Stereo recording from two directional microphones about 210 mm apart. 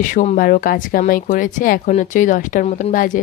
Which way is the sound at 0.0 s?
35° left (ahead or behind).